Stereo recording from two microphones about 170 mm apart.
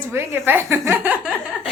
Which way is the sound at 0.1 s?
15° right (ahead or behind).